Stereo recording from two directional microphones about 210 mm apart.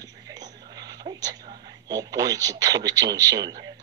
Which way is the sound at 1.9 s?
20° right (ahead or behind).